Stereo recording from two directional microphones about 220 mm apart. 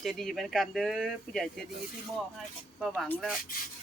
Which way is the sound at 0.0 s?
Centre (ahead or behind).